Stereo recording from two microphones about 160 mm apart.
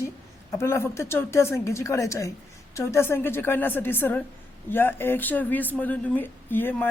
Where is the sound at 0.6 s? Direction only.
15° left (ahead or behind).